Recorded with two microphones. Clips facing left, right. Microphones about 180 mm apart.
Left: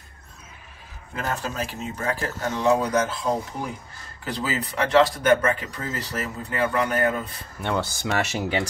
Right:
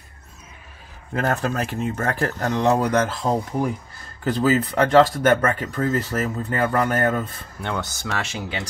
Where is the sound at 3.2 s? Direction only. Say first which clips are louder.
Right 3 dB; 30° right (ahead or behind).